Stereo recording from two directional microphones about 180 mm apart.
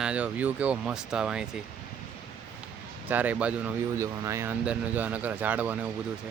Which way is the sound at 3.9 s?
20° right (ahead or behind).